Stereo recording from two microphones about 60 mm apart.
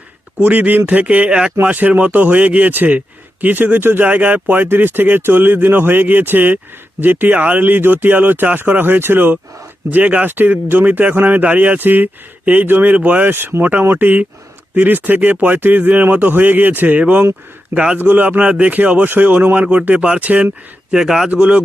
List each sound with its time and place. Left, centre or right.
0.3 s speech: right
13.3 s speech: right
20.9 s speech: centre